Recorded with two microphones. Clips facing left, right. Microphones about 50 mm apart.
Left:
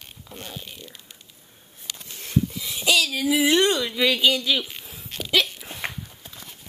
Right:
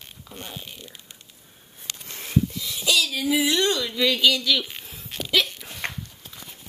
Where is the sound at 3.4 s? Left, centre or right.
Left.